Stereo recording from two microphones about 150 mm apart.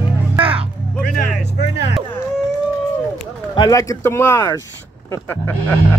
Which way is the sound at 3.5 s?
30° left (ahead or behind).